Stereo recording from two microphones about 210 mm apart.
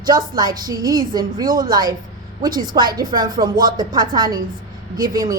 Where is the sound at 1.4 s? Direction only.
40° right (ahead or behind).